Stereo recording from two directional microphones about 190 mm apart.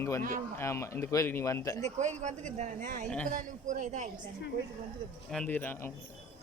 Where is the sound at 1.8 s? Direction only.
35° right (ahead or behind).